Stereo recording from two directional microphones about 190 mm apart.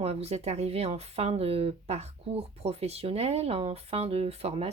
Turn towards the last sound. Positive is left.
turn(degrees=-30)  # may be behind; listen again after turning